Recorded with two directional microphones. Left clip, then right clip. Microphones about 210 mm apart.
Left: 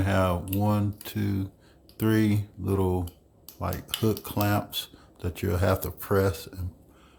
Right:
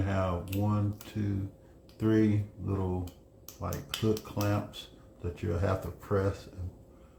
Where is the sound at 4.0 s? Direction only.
60° left (ahead or behind).